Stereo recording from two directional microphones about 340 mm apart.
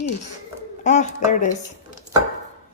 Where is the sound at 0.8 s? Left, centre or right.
Left.